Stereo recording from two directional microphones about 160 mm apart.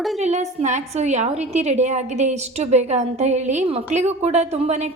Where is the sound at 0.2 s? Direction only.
45° right (ahead or behind).